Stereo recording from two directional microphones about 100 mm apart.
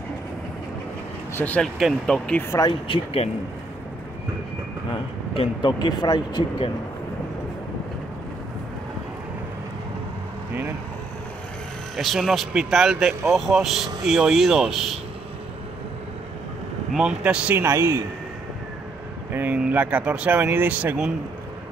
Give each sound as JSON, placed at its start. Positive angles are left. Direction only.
{"t": 1.3, "sound": "speech", "side_deg": 15}
{"t": 1.6, "sound": "speech", "side_deg": 0}
{"t": 2.7, "sound": "speech", "side_deg": 65}
{"t": 5.3, "sound": "speech", "side_deg": 65}
{"t": 5.7, "sound": "speech", "side_deg": 45}
{"t": 12.0, "sound": "speech", "side_deg": 0}
{"t": 16.9, "sound": "speech", "side_deg": -5}
{"t": 17.6, "sound": "a man's voice", "side_deg": -30}
{"t": 19.3, "sound": "speech", "side_deg": -20}